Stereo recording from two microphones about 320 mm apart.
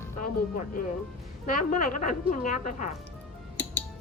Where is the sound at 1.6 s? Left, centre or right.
Left.